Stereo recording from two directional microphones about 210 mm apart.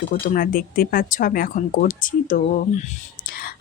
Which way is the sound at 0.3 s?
40° left (ahead or behind).